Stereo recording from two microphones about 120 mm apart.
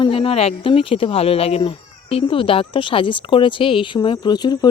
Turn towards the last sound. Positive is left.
turn(degrees=35)  # may be behind; listen again after turning